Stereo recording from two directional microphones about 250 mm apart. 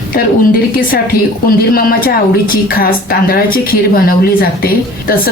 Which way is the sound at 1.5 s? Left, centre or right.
Left.